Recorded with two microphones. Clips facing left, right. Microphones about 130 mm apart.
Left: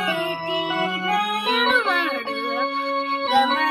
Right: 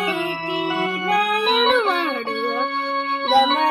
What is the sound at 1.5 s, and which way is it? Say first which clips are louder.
Music: right 3 dB; 45° right (ahead or behind).